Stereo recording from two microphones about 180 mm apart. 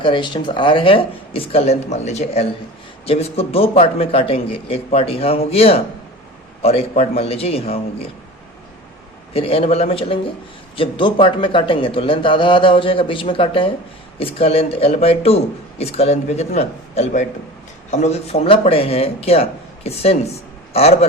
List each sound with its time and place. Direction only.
0.0 s a man's voice: 25° left (ahead or behind)
9.3 s a man's voice: 30° left (ahead or behind)